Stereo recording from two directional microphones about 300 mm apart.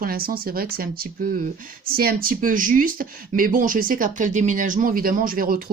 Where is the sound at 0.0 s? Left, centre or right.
Right.